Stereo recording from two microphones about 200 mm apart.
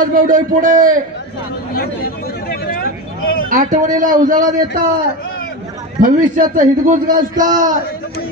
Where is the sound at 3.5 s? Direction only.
40° right (ahead or behind).